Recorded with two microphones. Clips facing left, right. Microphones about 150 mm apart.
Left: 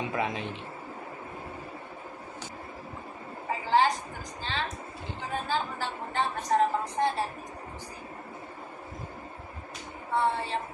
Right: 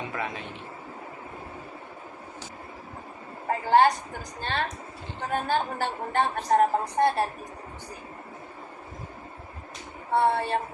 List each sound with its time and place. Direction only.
3.5 s a sound: 55° right (ahead or behind)
4.4 s a woman's voice: 55° right (ahead or behind)
10.2 s a woman's voice: 60° right (ahead or behind)